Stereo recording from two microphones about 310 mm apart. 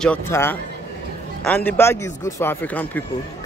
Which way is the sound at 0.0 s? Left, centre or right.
Centre.